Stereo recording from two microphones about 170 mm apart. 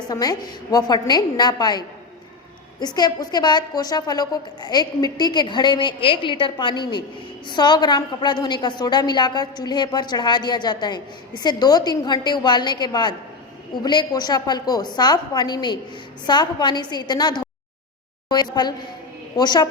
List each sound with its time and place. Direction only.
0.1 s a woman's voice: 20° left (ahead or behind)
2.8 s a woman's voice: 25° left (ahead or behind)